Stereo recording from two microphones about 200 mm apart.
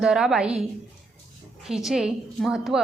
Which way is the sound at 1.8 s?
Centre (ahead or behind).